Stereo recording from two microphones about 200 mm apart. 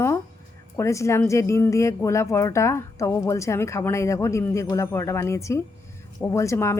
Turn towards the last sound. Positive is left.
turn(degrees=15)  # may be behind; listen again after turning